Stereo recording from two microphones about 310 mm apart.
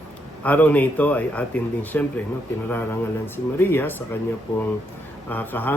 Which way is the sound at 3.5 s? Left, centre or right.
Centre.